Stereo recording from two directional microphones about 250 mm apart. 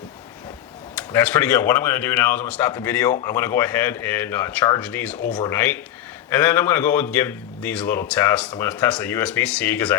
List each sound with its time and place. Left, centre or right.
0.9 s speech: centre